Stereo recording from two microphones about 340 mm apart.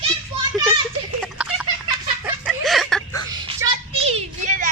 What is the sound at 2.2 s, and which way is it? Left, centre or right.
Chicken, centre.